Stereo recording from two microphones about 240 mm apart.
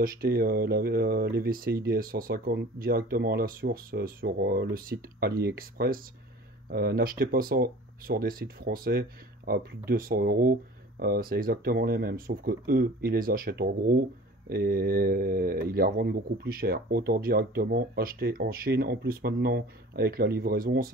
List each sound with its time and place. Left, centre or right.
0.0 s speech: right